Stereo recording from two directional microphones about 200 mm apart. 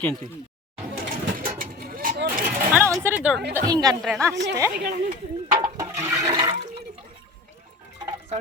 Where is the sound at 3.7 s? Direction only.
20° right (ahead or behind).